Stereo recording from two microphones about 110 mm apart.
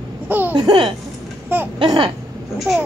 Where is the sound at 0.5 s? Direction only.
55° right (ahead or behind).